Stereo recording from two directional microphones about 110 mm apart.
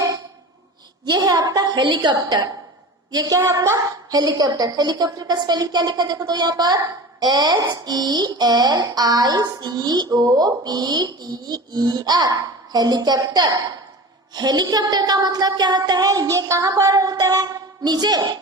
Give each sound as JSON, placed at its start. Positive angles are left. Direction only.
{"t": 1.0, "sound": "a woman's voice", "side_deg": -40}